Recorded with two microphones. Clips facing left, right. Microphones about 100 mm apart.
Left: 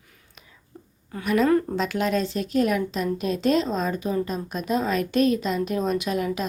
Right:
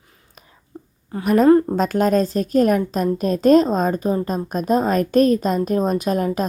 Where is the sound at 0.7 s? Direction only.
30° right (ahead or behind).